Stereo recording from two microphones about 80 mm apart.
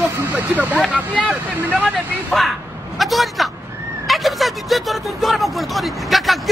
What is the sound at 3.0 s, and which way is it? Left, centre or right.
Speech, centre.